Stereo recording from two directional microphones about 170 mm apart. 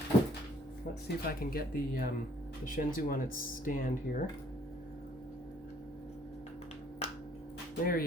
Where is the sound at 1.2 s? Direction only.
60° left (ahead or behind).